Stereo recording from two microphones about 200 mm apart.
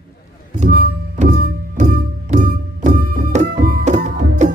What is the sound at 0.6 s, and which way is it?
Music, 40° right (ahead or behind).